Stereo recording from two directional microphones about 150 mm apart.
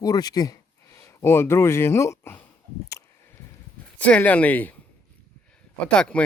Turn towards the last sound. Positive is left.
turn(degrees=5)  # may be behind; listen again after turning